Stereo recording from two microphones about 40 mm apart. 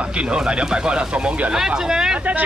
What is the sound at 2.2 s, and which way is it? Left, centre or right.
Speech, right.